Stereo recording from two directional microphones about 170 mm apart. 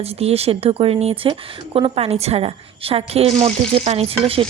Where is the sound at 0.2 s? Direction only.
35° right (ahead or behind).